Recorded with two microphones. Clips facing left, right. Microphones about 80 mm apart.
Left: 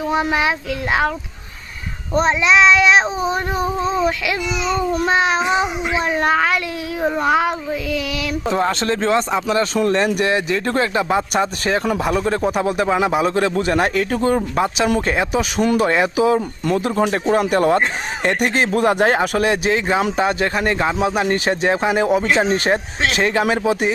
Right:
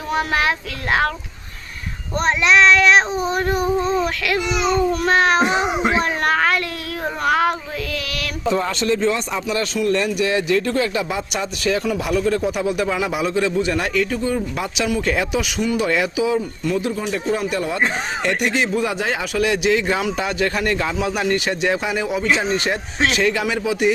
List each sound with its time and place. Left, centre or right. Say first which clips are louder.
0.1 s speech: even; centre
2.5 s speech: even; centre
5.0 s speech: right 1 dB; centre
8.5 s speech: left 1 dB; left
10.1 s speech: even; left
14.5 s speech: left 4 dB; left
15.9 s speech: left 3 dB; left
16.2 s speech: left 3 dB; left